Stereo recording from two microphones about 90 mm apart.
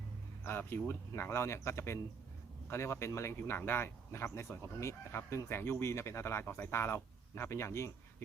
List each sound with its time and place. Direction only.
0.7 s speech: 25° left (ahead or behind)